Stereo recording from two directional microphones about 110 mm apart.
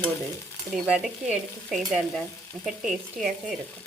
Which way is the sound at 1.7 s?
Centre (ahead or behind).